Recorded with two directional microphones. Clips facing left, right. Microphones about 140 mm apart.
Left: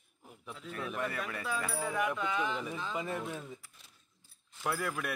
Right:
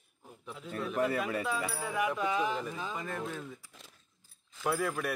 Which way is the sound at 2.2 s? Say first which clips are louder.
Right 3 dB; 15° right (ahead or behind).